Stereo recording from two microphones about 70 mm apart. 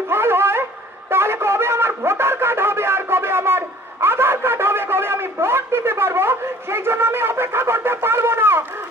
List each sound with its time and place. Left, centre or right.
0.1 s dog: right
1.1 s wind instrument: right